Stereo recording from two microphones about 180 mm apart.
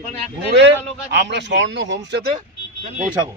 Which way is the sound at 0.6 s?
70° right (ahead or behind).